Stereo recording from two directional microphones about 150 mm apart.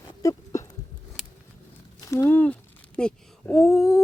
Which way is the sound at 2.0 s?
20° left (ahead or behind).